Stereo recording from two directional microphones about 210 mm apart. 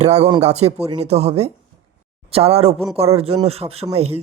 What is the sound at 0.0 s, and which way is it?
Speech, 30° right (ahead or behind).